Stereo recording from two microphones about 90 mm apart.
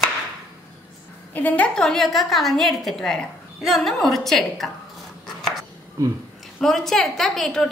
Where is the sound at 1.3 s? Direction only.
20° left (ahead or behind).